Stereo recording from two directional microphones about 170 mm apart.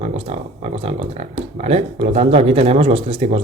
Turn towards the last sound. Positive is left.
turn(degrees=-35)  # may be behind; listen again after turning